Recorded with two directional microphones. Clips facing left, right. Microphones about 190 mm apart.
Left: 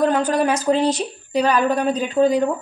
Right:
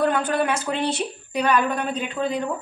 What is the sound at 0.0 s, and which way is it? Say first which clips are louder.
A woman's voice: left 4 dB; 40° left (ahead or behind).